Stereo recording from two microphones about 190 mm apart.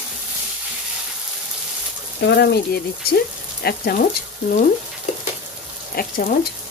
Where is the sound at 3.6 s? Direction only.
55° left (ahead or behind).